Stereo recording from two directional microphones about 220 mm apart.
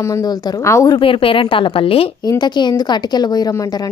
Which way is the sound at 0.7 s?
15° left (ahead or behind).